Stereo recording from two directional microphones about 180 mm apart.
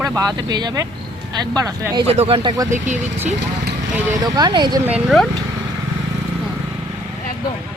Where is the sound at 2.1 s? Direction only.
35° right (ahead or behind).